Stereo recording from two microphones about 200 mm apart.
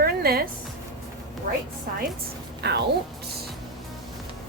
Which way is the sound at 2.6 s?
55° right (ahead or behind).